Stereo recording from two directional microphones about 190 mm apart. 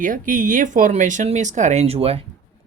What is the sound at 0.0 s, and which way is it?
Speech, 45° right (ahead or behind).